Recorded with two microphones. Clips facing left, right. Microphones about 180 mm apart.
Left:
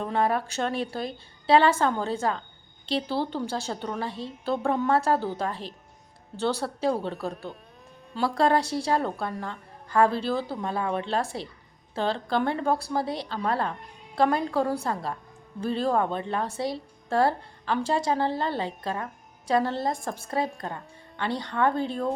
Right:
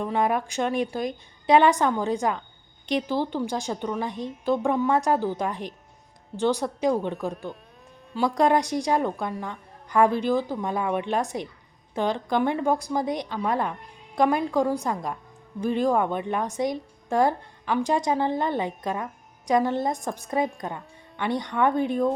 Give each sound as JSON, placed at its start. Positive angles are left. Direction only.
{"t": 0.0, "sound": "a woman's voice", "side_deg": -15}